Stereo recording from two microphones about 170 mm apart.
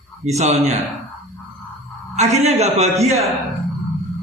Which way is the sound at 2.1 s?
40° right (ahead or behind).